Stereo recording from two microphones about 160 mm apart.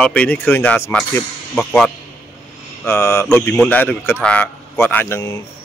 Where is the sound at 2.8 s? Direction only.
15° left (ahead or behind).